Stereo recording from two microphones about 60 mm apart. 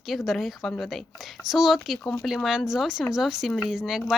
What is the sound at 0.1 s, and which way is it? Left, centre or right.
Speech, centre.